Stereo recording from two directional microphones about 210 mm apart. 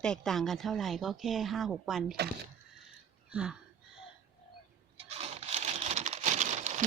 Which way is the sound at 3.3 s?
5° right (ahead or behind).